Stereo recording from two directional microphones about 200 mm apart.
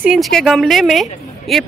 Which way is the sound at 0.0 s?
Centre (ahead or behind).